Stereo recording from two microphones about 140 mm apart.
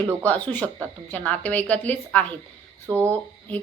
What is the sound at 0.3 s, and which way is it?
A woman's voice, 10° left (ahead or behind).